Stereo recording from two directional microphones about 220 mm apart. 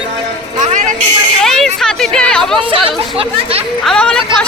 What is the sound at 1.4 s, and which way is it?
Speech, centre (ahead or behind).